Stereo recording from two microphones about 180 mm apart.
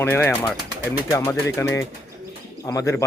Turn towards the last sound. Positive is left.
turn(degrees=15)  # may be behind; listen again after turning